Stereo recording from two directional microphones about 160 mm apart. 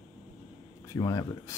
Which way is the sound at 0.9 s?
25° left (ahead or behind).